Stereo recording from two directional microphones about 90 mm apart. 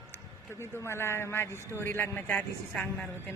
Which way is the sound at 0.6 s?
30° left (ahead or behind).